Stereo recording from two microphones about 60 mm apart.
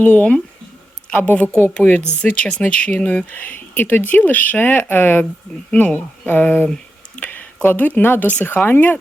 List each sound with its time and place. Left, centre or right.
0.0 s speech: left